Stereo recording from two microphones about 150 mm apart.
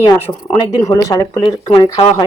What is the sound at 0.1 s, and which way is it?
Speech, 25° left (ahead or behind).